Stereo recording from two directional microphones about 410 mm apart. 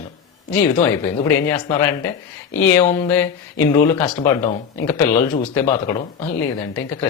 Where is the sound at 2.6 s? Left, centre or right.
Centre.